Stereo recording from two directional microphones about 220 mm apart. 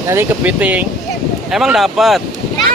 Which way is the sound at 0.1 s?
10° right (ahead or behind).